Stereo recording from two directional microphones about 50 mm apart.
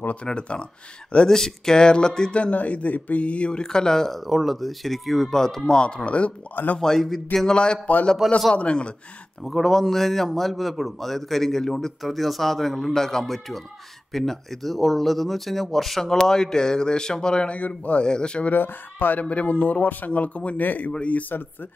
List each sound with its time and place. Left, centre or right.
0.1 s speech: left
4.2 s speech: centre
5.7 s speech: centre
6.5 s speech: left
6.8 s speech: centre
8.2 s speech: centre
8.5 s speech: left
9.4 s speech: centre
17.6 s speech: left
18.0 s speech: centre
18.5 s speech: left
19.2 s speech: left